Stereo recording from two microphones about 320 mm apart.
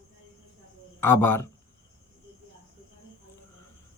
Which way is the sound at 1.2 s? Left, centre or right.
Left.